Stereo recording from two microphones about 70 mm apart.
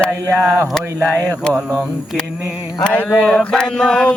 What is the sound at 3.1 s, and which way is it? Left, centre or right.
Music, centre.